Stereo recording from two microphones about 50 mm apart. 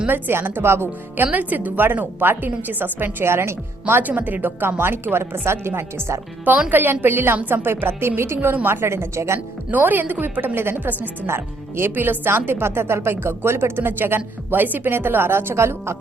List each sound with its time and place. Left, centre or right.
0.1 s speech: right
1.1 s a woman's voice: right
3.2 s a woman's voice: right
3.8 s a woman's voice: right
4.6 s speech: right
6.7 s a woman's voice: right
9.7 s a woman's voice: right